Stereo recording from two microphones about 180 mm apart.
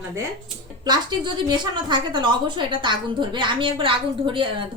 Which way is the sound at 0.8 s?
25° right (ahead or behind).